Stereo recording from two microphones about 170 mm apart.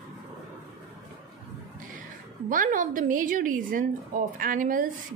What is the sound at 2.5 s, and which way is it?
A woman's voice, 50° right (ahead or behind).